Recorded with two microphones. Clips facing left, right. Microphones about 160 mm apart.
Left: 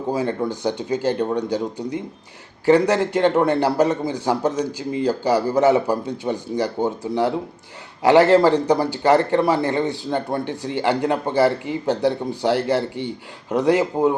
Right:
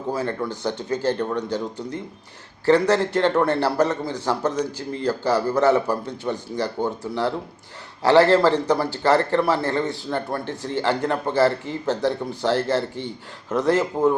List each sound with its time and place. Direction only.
0.1 s a man's voice: 15° left (ahead or behind)